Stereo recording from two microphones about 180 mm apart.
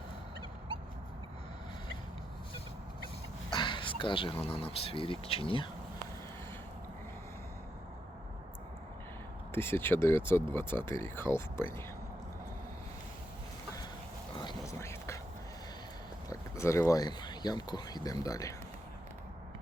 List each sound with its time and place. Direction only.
3.5 s speech: 25° left (ahead or behind)
9.5 s speech: 10° left (ahead or behind)
14.3 s a sound: 20° left (ahead or behind)
16.3 s speech: 15° left (ahead or behind)